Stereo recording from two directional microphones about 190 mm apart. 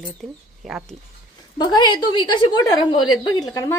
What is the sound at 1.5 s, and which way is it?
A woman's voice, 20° left (ahead or behind).